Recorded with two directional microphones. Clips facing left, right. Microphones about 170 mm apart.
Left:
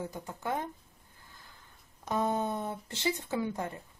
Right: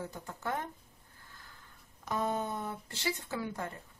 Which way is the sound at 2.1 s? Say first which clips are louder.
Left 3 dB; 25° left (ahead or behind).